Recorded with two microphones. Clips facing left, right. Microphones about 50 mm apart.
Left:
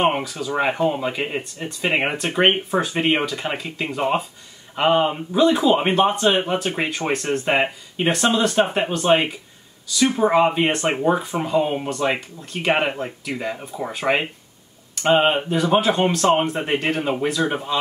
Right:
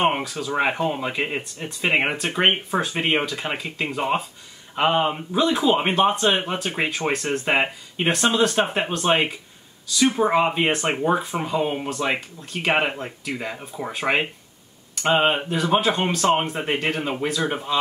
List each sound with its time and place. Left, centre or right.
0.0 s speech: centre